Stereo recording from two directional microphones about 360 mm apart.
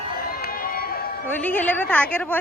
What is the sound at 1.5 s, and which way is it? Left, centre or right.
Speech, centre.